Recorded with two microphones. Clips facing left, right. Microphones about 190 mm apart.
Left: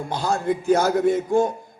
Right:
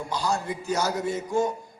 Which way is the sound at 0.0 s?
55° left (ahead or behind).